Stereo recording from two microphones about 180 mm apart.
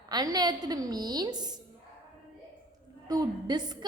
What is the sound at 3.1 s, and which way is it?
Speech, 20° right (ahead or behind).